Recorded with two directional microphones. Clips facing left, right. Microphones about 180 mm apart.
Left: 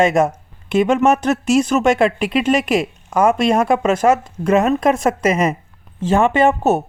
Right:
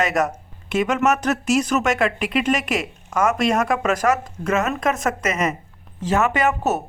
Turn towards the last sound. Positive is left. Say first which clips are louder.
# left 6 dB
turn(degrees=30)  # may be behind; listen again after turning